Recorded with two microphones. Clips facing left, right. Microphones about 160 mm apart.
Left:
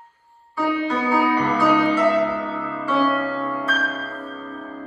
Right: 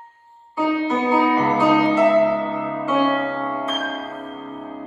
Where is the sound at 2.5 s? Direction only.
15° right (ahead or behind).